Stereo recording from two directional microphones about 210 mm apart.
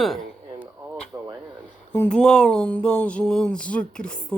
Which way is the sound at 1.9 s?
5° left (ahead or behind).